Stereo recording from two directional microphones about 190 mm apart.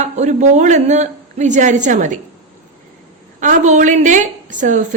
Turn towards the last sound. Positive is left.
turn(degrees=-40)  # may be behind; listen again after turning